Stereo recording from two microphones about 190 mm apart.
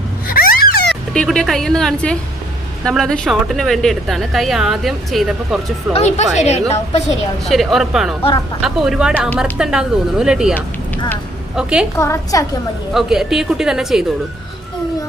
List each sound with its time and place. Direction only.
0.3 s a sound: 50° left (ahead or behind)
1.1 s a woman's voice: 5° left (ahead or behind)
5.9 s a woman's voice: 35° left (ahead or behind)
7.4 s a woman's voice: centre (ahead or behind)
11.5 s a woman's voice: 5° right (ahead or behind)
11.9 s a woman's voice: 15° left (ahead or behind)
12.9 s a woman's voice: centre (ahead or behind)